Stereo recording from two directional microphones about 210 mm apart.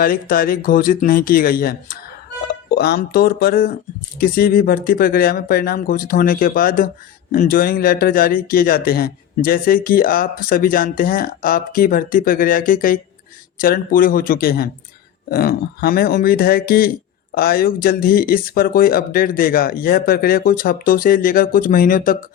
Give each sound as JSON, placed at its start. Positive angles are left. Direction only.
{"t": 0.0, "sound": "speech", "side_deg": 45}